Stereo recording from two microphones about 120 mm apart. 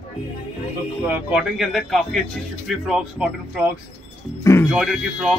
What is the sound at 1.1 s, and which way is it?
A man's voice, 10° right (ahead or behind).